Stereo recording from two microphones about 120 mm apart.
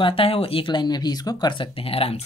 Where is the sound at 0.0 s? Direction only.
50° left (ahead or behind).